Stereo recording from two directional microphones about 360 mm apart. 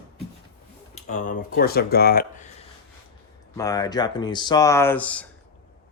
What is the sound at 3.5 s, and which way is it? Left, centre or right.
Speech, centre.